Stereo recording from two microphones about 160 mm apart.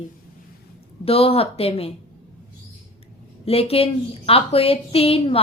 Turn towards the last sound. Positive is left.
turn(degrees=35)  # may be behind; listen again after turning